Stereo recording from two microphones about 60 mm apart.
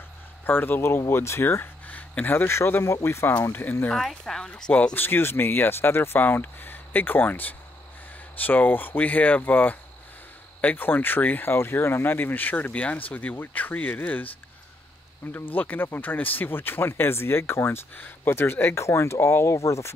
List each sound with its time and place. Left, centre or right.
0.5 s speech: left
1.9 s a sound: left
2.3 s speech: left
3.9 s speech: centre
4.9 s speech: left
15.3 s speech: left